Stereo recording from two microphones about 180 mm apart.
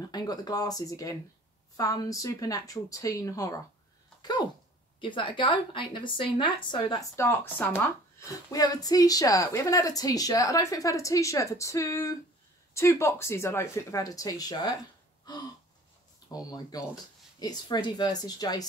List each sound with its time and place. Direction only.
0.0 s a woman's voice: 20° left (ahead or behind)
4.2 s a sound: 25° left (ahead or behind)
5.0 s a woman's voice: 25° left (ahead or behind)
16.3 s a woman's voice: 20° left (ahead or behind)